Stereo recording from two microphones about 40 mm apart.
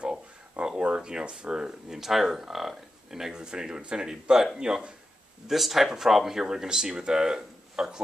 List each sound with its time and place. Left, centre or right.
0.6 s speech: right
2.0 s speech: centre
5.5 s speech: centre